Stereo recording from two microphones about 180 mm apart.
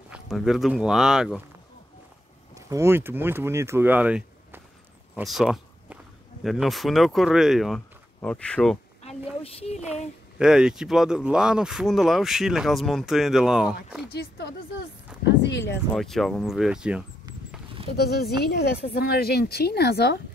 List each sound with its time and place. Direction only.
0.1 s speech: centre (ahead or behind)
2.5 s speech: 15° right (ahead or behind)
5.1 s a sound: centre (ahead or behind)
6.4 s speech: centre (ahead or behind)
9.0 s a sound: 35° left (ahead or behind)
10.4 s speech: 5° right (ahead or behind)
14.1 s speech: 65° left (ahead or behind)
15.2 s speech: 80° left
15.9 s speech: centre (ahead or behind)
18.0 s speech: 65° left (ahead or behind)